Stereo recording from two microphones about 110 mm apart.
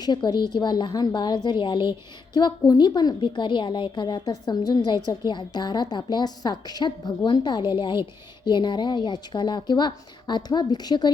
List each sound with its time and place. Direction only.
0.0 s a woman's voice: 40° left (ahead or behind)